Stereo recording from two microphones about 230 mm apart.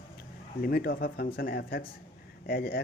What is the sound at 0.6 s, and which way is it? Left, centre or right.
Speech, left.